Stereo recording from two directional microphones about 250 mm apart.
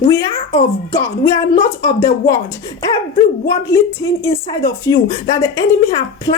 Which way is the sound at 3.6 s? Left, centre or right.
Centre.